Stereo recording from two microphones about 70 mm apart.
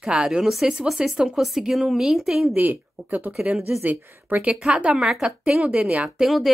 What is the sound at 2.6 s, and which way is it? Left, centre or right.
Speech, right.